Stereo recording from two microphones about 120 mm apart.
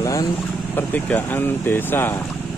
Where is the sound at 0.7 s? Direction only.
15° left (ahead or behind).